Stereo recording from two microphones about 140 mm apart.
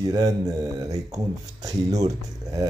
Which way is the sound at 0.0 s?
25° right (ahead or behind).